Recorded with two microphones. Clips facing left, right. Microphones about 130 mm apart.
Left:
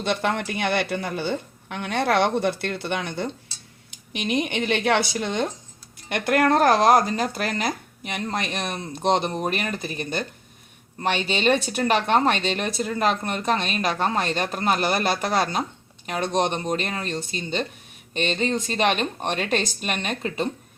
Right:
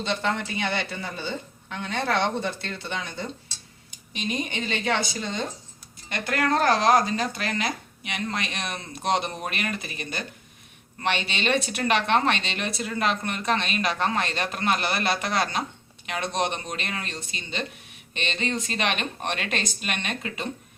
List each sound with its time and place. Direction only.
0.0 s speech: 60° left (ahead or behind); by 20.5 s 40° left (ahead or behind)